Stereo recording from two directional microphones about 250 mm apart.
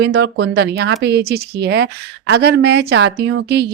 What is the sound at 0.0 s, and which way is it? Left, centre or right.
A woman's voice, right.